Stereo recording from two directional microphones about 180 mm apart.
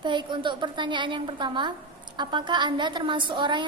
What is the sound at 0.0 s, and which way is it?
A woman's voice, 25° right (ahead or behind).